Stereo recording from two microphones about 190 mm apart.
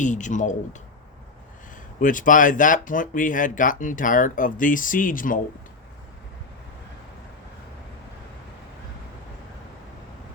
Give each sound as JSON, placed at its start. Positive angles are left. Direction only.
{"t": 0.0, "sound": "speech", "side_deg": 40}
{"t": 2.0, "sound": "speech", "side_deg": 45}